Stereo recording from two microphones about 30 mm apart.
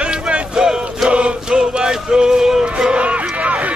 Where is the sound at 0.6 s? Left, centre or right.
Right.